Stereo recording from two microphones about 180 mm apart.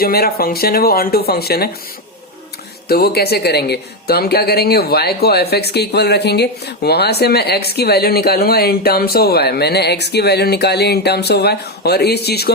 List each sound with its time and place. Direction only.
0.0 s speech: 60° left (ahead or behind)
2.9 s speech: 60° left (ahead or behind)